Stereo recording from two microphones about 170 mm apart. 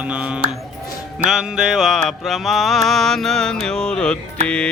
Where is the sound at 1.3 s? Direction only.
5° right (ahead or behind).